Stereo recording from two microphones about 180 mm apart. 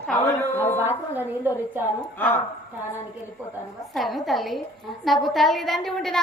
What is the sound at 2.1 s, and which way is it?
Speech, 10° left (ahead or behind).